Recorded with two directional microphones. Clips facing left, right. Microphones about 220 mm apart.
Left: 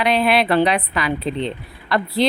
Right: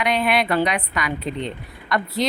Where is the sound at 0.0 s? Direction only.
30° left (ahead or behind).